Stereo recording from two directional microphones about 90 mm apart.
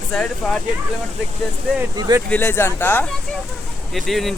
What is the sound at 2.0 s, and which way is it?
Speech, 50° right (ahead or behind).